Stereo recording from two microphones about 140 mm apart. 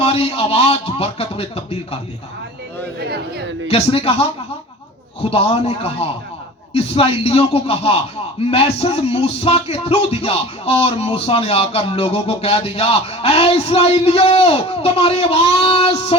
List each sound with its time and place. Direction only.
0.0 s a man's voice: 45° left (ahead or behind)
3.7 s a man's voice: 45° left (ahead or behind)
5.3 s a man's voice: 45° left (ahead or behind)